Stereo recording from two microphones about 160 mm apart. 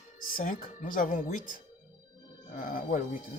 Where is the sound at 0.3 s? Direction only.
60° left (ahead or behind).